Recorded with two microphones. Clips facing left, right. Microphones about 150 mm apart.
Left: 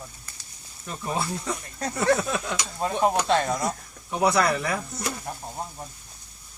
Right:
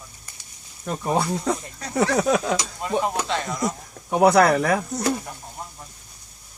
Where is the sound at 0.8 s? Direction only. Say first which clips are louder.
Right 6 dB; 50° right (ahead or behind).